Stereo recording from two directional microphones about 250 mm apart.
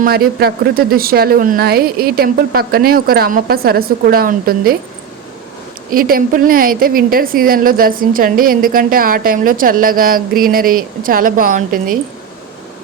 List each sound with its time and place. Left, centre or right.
0.0 s a woman's voice: right
5.9 s a woman's voice: right